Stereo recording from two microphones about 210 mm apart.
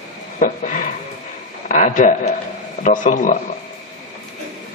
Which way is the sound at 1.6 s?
35° left (ahead or behind).